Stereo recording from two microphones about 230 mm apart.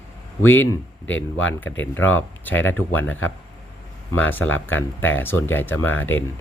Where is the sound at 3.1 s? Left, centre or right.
Left.